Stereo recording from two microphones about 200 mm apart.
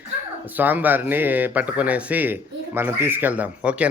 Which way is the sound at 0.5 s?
10° right (ahead or behind).